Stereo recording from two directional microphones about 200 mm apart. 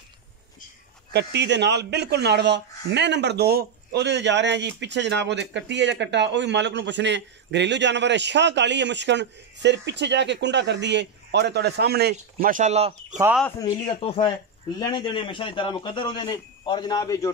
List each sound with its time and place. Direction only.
1.1 s a man's voice: 60° right (ahead or behind); by 13.2 s 35° right (ahead or behind)
13.6 s speech: 25° left (ahead or behind)